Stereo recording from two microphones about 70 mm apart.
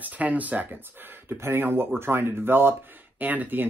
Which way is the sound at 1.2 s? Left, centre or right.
Right.